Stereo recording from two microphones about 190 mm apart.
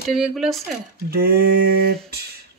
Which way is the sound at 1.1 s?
50° right (ahead or behind).